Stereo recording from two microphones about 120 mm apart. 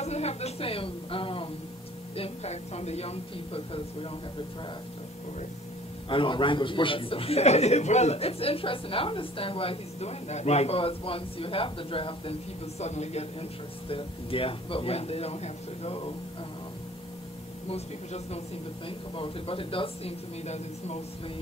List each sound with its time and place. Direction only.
0.0 s a woman's voice: 65° left (ahead or behind)
2.1 s a woman's voice: 60° left (ahead or behind)
6.0 s a man's voice: 45° left (ahead or behind)
17.6 s a woman's voice: 60° left (ahead or behind)
18.9 s a man's voice: 45° left (ahead or behind)
20.4 s a woman's voice: 65° left (ahead or behind)